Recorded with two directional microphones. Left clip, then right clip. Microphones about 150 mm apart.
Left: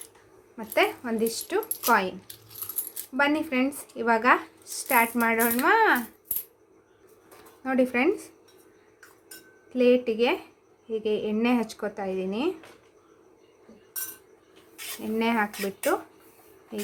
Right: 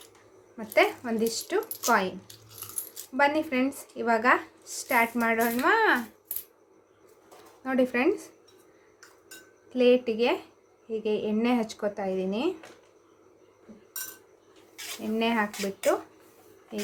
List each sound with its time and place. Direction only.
0.5 s speech: 10° left (ahead or behind)
7.3 s speech: 15° left (ahead or behind)
9.7 s speech: 15° left (ahead or behind)
15.1 s speech: 25° left (ahead or behind)
15.5 s speech: centre (ahead or behind)